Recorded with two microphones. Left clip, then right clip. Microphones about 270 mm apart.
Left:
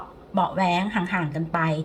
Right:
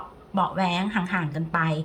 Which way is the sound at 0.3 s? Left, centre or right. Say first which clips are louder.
Left 2 dB; centre.